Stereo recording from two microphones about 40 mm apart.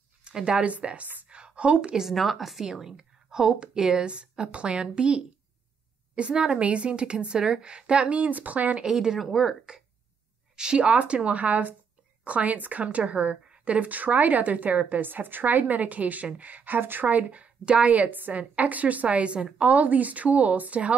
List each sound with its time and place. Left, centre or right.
0.2 s a woman's voice: right
1.3 s a sound: right
2.1 s a woman's voice: centre; by 8.2 s right
8.2 s a woman's voice: right
8.8 s speech: centre
9.2 s speech: centre
10.5 s a woman's voice: right
17.1 s a woman's voice: right
18.4 s a woman's voice: right